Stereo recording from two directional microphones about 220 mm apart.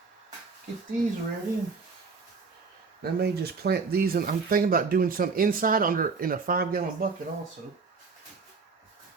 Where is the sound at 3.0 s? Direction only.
45° right (ahead or behind).